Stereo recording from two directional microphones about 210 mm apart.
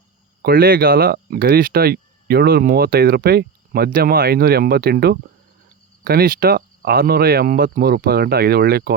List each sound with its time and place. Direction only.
0.4 s speech: 45° right (ahead or behind)